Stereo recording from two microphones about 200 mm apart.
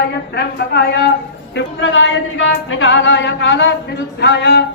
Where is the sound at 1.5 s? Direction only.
70° left (ahead or behind).